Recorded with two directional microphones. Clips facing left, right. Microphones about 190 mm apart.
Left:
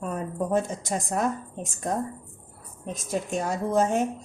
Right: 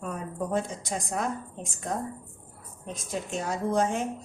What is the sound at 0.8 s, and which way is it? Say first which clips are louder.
Speech: left 4 dB; 45° left (ahead or behind).